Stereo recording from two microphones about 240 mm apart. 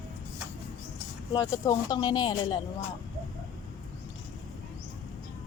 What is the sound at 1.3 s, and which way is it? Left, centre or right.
Speech, centre.